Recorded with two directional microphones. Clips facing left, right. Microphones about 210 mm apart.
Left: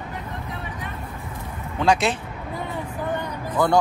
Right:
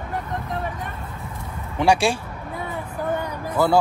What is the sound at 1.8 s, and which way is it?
Speech, 10° right (ahead or behind).